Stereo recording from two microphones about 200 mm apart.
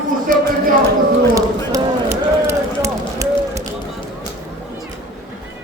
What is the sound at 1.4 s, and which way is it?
Run, 15° right (ahead or behind).